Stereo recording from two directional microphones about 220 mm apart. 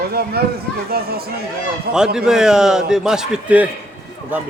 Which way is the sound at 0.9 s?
45° right (ahead or behind).